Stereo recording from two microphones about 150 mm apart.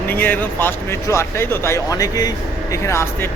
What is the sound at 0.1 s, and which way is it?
Speech, 15° left (ahead or behind).